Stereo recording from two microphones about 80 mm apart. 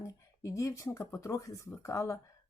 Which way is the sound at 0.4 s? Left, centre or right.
Left.